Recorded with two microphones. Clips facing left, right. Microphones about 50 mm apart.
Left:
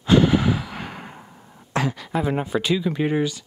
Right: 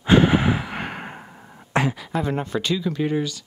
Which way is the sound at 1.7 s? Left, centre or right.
Right.